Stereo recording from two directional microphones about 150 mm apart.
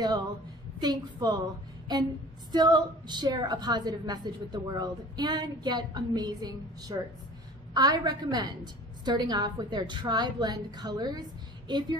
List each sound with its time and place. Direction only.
0.7 s a woman's voice: 30° right (ahead or behind)